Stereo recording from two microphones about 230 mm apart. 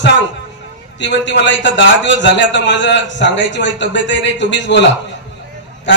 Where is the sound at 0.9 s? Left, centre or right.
Left.